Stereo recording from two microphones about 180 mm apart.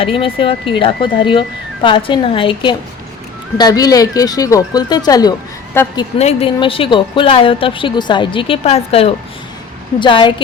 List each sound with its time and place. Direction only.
0.0 s a woman's voice: 30° left (ahead or behind); by 5.9 s 10° left (ahead or behind)
6.1 s a woman's voice: 35° left (ahead or behind)